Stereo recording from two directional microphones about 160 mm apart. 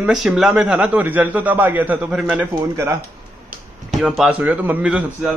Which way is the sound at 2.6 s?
20° right (ahead or behind).